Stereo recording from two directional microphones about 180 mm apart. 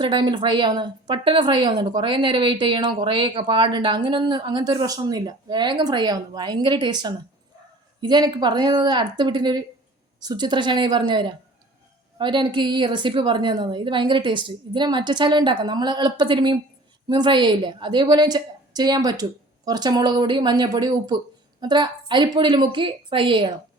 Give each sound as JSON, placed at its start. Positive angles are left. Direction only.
{"t": 0.0, "sound": "a woman's voice", "side_deg": -25}